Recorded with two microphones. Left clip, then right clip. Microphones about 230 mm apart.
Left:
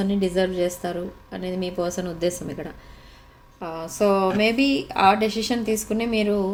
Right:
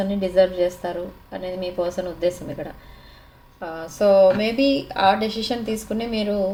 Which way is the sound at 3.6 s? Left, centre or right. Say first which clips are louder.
Right 3 dB; left.